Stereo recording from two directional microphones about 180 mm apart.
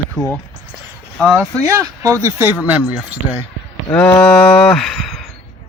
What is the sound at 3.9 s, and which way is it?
Speech, 15° left (ahead or behind).